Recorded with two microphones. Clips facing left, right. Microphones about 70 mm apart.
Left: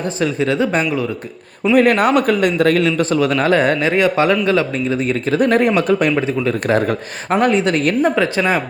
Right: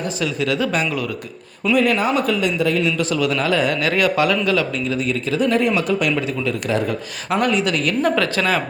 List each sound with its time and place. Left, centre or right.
0.2 s speech: left
1.7 s speech: left
3.0 s speech: left
3.8 s speech: left
8.0 s speech: centre